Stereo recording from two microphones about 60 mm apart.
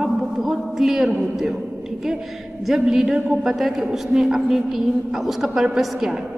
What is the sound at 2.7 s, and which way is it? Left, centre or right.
A woman's voice, centre.